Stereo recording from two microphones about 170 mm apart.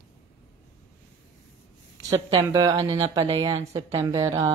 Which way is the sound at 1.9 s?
20° right (ahead or behind).